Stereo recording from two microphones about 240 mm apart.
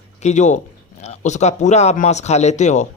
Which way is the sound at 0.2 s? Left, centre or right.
Left.